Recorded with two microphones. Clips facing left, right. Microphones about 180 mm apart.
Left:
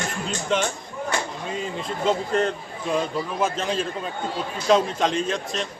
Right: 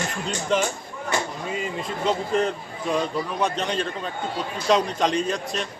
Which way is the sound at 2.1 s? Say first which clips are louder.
Left 1 dB; centre (ahead or behind).